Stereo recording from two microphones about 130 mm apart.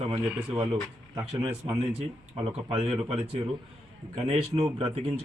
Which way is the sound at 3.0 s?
50° right (ahead or behind).